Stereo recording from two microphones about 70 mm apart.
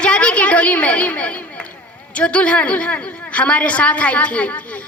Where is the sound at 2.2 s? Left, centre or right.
Centre.